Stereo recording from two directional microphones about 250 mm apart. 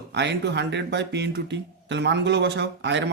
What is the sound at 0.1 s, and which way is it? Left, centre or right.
Speech, right.